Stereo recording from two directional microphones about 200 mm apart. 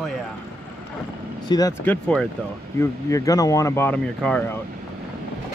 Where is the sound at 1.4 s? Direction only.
20° left (ahead or behind).